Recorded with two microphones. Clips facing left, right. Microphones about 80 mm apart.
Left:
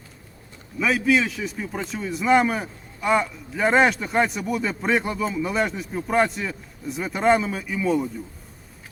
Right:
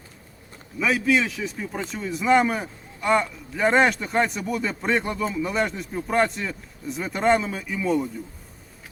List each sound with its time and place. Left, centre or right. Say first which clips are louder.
0.8 s a man's voice: left 1 dB; centre